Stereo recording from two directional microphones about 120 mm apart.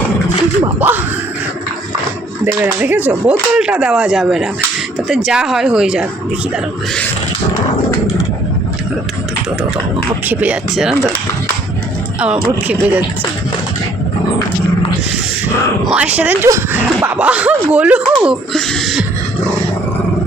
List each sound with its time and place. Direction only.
0.8 s speech: 15° right (ahead or behind)
2.4 s speech: 15° right (ahead or behind)
10.2 s speech: 10° right (ahead or behind)
12.6 s speech: 15° right (ahead or behind)
15.8 s speech: 5° right (ahead or behind)
18.5 s speech: 5° left (ahead or behind)